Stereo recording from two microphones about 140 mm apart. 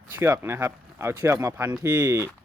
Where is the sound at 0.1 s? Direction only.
15° right (ahead or behind).